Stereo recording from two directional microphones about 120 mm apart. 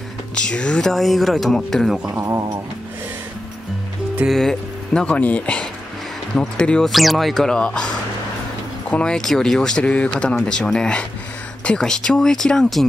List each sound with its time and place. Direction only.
0.3 s speech: 5° left (ahead or behind)
2.1 s speech: 25° right (ahead or behind)
4.3 s speech: 5° left (ahead or behind)
8.9 s speech: 5° left (ahead or behind)